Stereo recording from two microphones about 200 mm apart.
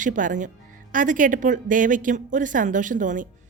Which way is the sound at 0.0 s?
40° right (ahead or behind).